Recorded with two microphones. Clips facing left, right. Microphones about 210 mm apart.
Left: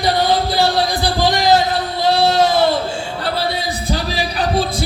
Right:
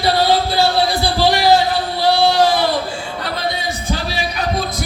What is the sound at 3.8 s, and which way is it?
Music, 35° left (ahead or behind).